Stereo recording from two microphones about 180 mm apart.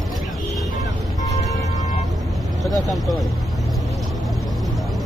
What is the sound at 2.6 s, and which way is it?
Speech, centre (ahead or behind).